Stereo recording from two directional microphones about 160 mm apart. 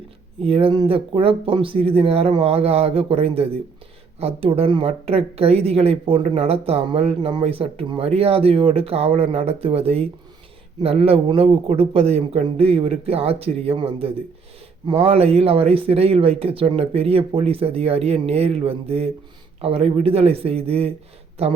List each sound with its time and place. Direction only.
0.4 s speech: 35° right (ahead or behind)